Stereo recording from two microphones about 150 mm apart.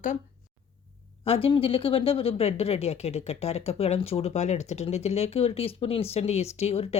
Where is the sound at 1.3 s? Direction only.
40° left (ahead or behind).